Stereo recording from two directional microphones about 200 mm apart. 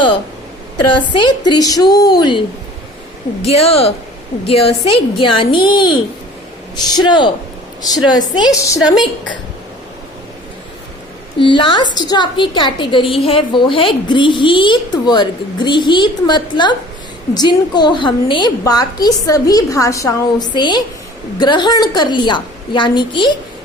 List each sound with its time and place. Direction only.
0.8 s a woman's voice: 20° left (ahead or behind)
3.4 s a woman's voice: 30° left (ahead or behind)
11.3 s a woman's voice: 25° left (ahead or behind)